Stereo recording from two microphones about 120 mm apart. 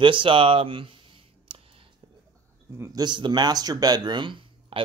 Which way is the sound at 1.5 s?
50° right (ahead or behind).